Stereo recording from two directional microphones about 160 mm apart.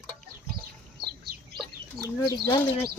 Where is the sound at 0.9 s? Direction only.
75° right (ahead or behind).